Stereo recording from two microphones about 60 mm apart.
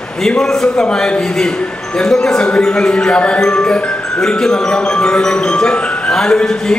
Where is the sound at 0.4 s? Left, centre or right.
Centre.